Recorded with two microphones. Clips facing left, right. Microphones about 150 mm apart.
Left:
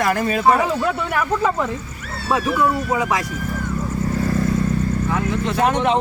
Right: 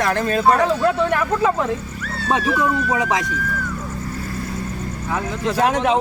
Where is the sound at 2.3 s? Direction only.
25° right (ahead or behind).